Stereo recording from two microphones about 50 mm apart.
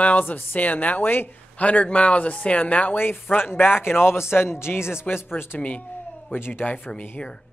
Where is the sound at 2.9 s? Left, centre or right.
Left.